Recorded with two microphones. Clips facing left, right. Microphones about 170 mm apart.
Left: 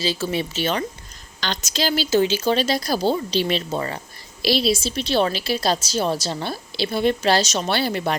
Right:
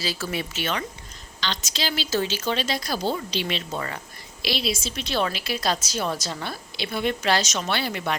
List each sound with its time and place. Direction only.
0.0 s speech: 25° left (ahead or behind)
1.4 s a woman's voice: 45° left (ahead or behind)